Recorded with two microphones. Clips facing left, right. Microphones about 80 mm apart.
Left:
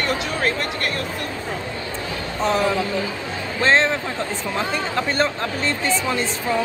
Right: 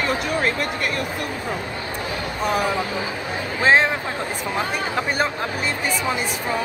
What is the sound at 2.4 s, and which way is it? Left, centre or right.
Speech, centre.